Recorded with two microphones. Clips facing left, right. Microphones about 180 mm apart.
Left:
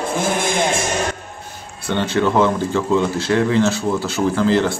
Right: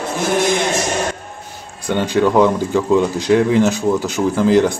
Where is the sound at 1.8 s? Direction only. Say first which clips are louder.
Right 3 dB; 15° right (ahead or behind).